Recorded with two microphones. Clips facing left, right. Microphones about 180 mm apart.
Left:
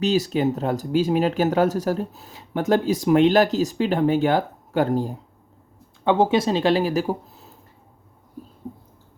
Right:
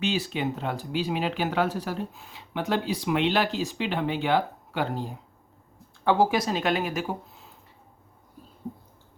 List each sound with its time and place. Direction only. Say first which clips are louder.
0.0 s speech: left 7 dB; 40° left (ahead or behind)
6.1 s speech: left 4 dB; 25° left (ahead or behind); by 7.5 s 40° left (ahead or behind)